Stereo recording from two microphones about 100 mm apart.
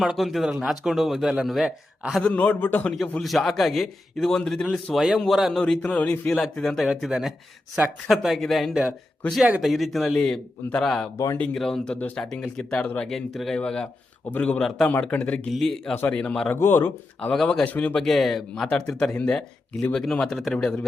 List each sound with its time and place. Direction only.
0.0 s a man's voice: 5° right (ahead or behind)
2.2 s speech: 15° left (ahead or behind)
3.2 s a man's voice: 5° left (ahead or behind)
16.0 s speech: 15° left (ahead or behind)
16.5 s speech: 25° left (ahead or behind)
17.3 s a man's voice: 10° left (ahead or behind)